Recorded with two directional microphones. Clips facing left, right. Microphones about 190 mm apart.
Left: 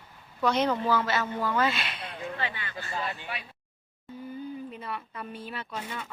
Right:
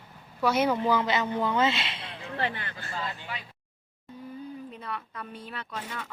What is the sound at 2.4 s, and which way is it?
Speech, 55° right (ahead or behind).